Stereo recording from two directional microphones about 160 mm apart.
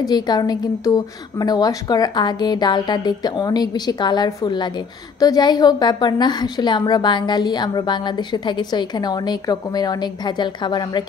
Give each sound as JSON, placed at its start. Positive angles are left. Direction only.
{"t": 0.0, "sound": "a woman's voice", "side_deg": 25}